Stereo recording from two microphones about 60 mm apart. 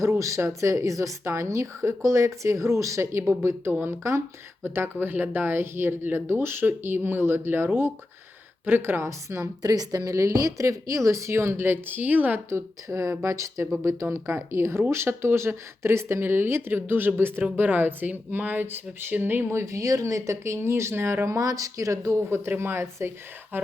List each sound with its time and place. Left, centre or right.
0.0 s a woman's voice: right
9.6 s a woman's voice: right
12.5 s speech: right
19.5 s speech: right
21.3 s speech: right